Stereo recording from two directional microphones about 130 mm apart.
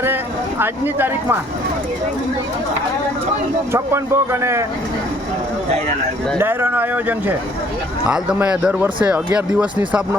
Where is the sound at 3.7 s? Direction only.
20° right (ahead or behind).